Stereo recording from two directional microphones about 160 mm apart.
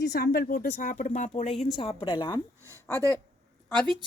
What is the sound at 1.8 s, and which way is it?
Speech, 35° left (ahead or behind).